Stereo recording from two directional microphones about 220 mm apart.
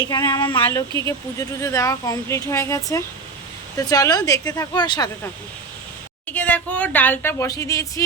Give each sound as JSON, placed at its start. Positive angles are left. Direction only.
{"t": 0.1, "sound": "speech", "side_deg": 20}
{"t": 6.2, "sound": "speech", "side_deg": 5}